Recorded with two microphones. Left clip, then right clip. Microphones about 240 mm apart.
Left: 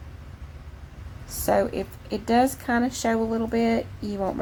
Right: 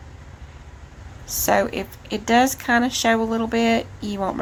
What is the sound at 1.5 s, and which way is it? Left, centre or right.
A woman's voice, centre.